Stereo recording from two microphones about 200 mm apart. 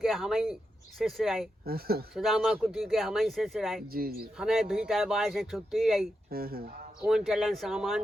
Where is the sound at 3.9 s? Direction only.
50° right (ahead or behind).